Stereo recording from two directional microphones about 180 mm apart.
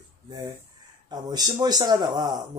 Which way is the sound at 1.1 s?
20° right (ahead or behind).